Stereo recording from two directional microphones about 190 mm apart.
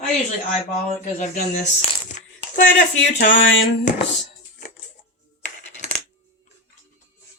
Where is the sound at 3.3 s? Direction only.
80° left.